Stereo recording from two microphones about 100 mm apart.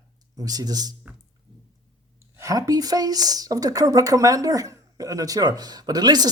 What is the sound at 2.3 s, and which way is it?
Speech, 35° right (ahead or behind).